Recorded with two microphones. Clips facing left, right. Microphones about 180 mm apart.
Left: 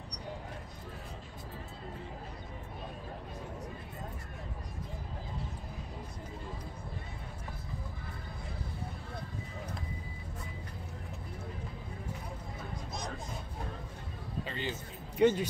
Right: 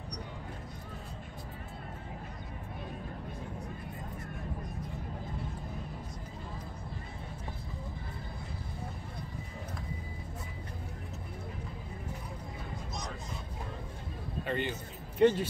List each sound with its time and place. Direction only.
14.4 s speech: 55° right (ahead or behind)
15.1 s speech: 5° left (ahead or behind)